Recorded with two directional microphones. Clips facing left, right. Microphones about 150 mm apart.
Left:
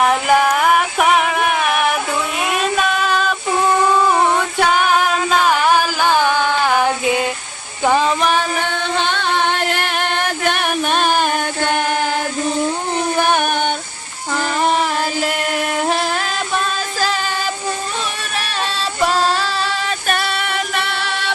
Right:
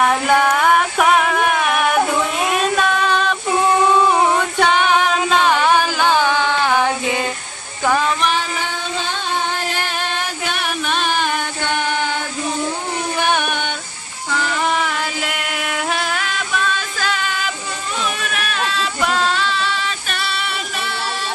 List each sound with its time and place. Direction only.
0.1 s music: 5° left (ahead or behind)
2.4 s child singing: 5° left (ahead or behind)
4.4 s music: 5° left (ahead or behind)
7.9 s child singing: 30° left (ahead or behind)
8.4 s music: 60° left (ahead or behind); by 12.2 s 45° left (ahead or behind)
13.1 s a sound: 40° left (ahead or behind)
18.2 s music: 35° left (ahead or behind); by 21.3 s 65° left (ahead or behind)